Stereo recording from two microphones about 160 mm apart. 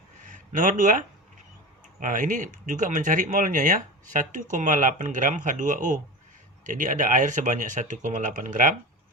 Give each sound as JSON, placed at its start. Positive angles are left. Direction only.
{"t": 0.3, "sound": "speech", "side_deg": -55}